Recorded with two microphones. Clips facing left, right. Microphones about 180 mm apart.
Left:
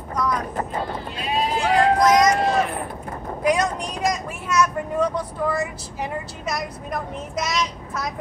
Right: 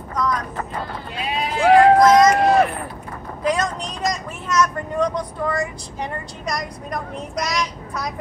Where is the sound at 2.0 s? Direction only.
15° left (ahead or behind).